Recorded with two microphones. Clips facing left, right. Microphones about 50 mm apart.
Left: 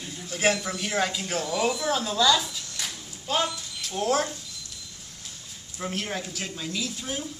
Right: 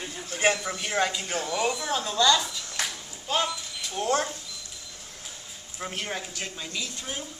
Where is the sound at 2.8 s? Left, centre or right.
Right.